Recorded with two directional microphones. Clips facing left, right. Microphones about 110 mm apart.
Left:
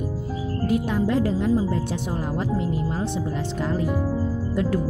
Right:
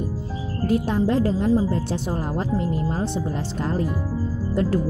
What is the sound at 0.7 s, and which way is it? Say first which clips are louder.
Speech: right 2 dB; 30° right (ahead or behind).